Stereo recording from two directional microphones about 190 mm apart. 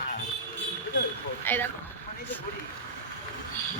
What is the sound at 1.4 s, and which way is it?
Speech, 10° left (ahead or behind).